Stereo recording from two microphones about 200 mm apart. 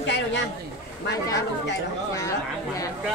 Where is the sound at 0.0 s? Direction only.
60° left (ahead or behind).